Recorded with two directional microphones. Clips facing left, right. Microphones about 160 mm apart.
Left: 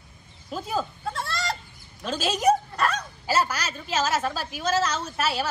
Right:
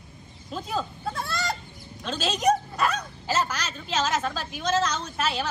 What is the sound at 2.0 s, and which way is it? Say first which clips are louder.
Speech: left 2 dB; 10° left (ahead or behind).